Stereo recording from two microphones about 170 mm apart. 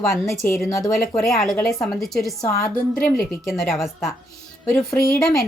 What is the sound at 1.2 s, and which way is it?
Speech, centre (ahead or behind).